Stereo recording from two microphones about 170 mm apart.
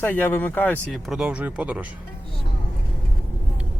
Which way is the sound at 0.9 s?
Centre (ahead or behind).